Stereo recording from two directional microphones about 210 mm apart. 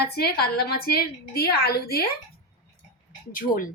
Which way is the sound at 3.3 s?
40° left (ahead or behind).